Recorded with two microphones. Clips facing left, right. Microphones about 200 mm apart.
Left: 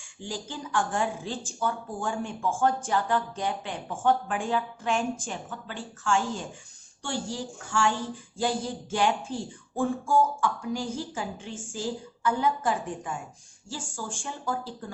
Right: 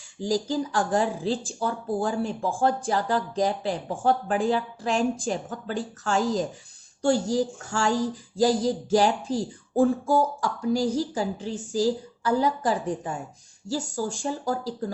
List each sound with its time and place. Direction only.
0.2 s speech: 40° right (ahead or behind)